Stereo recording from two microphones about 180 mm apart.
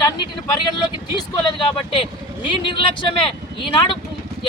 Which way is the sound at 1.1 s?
25° left (ahead or behind).